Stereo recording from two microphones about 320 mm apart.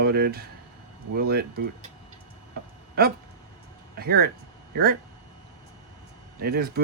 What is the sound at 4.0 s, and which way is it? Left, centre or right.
Speech, right.